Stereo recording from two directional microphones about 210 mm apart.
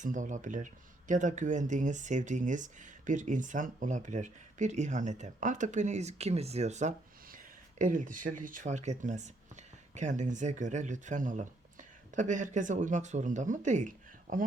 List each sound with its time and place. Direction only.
0.0 s speech: 35° right (ahead or behind)